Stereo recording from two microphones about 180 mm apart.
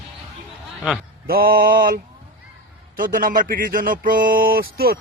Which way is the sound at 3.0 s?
50° right (ahead or behind).